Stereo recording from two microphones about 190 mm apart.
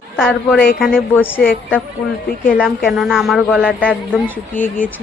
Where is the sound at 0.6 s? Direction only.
50° left (ahead or behind).